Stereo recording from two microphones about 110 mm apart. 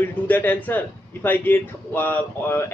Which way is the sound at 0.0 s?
15° left (ahead or behind).